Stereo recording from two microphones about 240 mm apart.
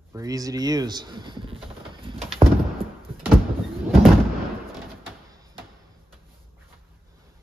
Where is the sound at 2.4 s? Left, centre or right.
Centre.